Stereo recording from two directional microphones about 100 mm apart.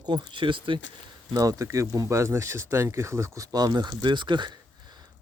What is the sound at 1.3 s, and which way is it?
Speech, 35° right (ahead or behind).